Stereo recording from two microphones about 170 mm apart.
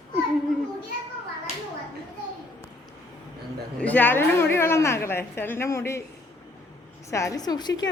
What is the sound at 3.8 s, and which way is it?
A woman's voice, 10° left (ahead or behind).